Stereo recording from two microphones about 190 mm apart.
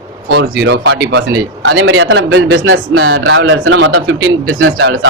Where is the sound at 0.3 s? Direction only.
55° right (ahead or behind); by 4.9 s 90° right.